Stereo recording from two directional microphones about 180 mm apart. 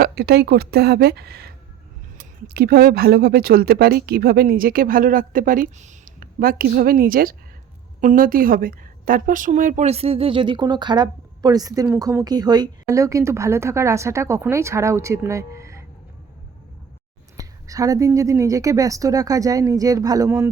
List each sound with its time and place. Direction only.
0.0 s a woman's voice: 65° right (ahead or behind); by 15.8 s 15° right (ahead or behind)
17.3 s a woman's voice: 20° right (ahead or behind)